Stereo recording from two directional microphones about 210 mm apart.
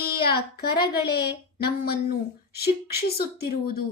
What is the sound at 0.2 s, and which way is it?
A woman's voice, 50° left (ahead or behind).